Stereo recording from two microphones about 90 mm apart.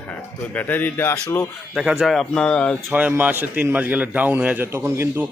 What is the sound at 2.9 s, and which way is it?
A man's voice, 15° right (ahead or behind).